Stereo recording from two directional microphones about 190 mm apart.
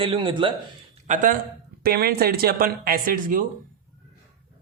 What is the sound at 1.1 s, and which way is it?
Speech, 40° right (ahead or behind).